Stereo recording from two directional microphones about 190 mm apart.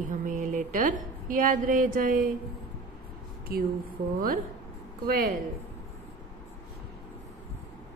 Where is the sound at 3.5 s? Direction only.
50° right (ahead or behind).